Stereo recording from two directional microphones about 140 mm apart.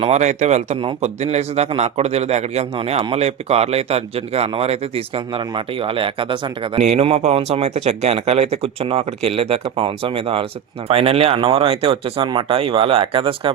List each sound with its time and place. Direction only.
0.0 s a man's voice: 55° right (ahead or behind); by 6.8 s 35° right (ahead or behind)
6.8 s a man's voice: 50° right (ahead or behind)